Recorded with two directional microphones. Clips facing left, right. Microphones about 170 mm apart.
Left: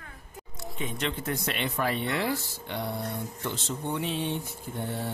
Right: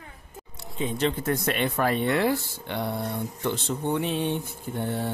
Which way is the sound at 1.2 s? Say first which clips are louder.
Right 5 dB; 50° right (ahead or behind).